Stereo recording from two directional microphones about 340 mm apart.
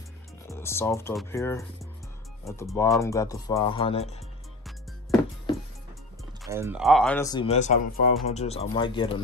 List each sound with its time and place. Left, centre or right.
0.5 s speech: centre
6.4 s speech: centre